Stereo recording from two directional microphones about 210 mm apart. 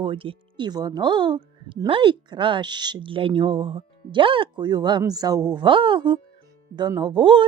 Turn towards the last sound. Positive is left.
turn(degrees=-25)  # may be behind; listen again after turning